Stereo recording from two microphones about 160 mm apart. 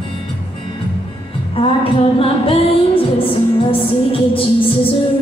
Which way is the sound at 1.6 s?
35° left (ahead or behind).